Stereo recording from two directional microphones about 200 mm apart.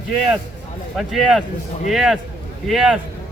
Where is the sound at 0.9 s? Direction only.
Centre (ahead or behind).